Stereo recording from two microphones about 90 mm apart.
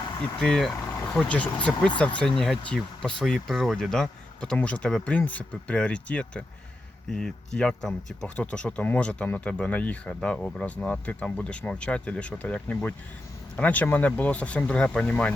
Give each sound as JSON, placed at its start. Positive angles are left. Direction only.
{"t": 0.2, "sound": "speech", "side_deg": 5}